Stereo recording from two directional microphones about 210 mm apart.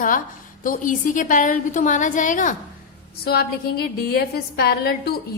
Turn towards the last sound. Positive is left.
turn(degrees=45)  # may be behind; listen again after turning